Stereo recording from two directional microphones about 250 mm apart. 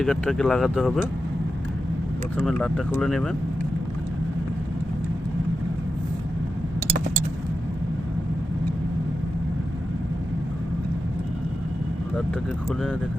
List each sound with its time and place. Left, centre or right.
0.0 s speech: centre
2.4 s speech: centre